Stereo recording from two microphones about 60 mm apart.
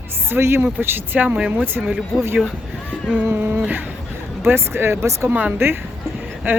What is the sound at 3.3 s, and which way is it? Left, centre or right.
Speech, right.